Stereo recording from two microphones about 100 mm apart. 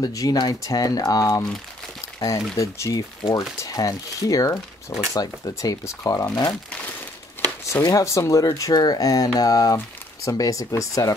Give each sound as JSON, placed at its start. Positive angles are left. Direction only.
{"t": 0.0, "sound": "speech", "side_deg": 40}
{"t": 7.6, "sound": "speech", "side_deg": 35}